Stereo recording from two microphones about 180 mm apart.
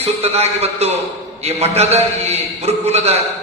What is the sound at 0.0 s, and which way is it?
A man's voice, 35° right (ahead or behind).